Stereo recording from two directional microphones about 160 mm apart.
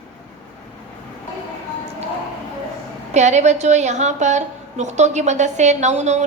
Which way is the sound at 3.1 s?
45° right (ahead or behind).